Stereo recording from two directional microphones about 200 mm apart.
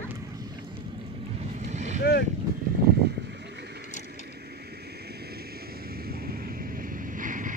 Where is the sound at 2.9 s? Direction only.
55° right (ahead or behind).